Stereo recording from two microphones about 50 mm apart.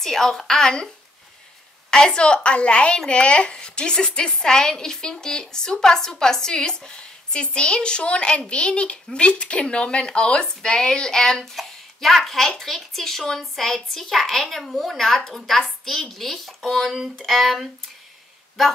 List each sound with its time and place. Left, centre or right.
0.0 s a woman's voice: centre
1.9 s a woman's voice: centre